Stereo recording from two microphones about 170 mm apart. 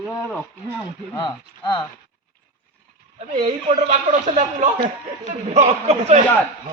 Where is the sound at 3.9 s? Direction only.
40° right (ahead or behind).